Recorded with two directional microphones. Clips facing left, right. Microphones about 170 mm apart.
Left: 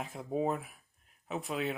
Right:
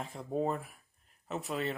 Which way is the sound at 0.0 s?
Centre (ahead or behind).